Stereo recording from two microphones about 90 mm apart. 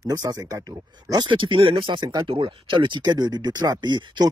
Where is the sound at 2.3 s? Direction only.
90° right; by 4.3 s 55° right (ahead or behind).